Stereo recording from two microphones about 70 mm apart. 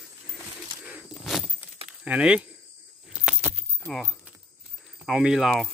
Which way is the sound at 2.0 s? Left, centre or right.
Centre.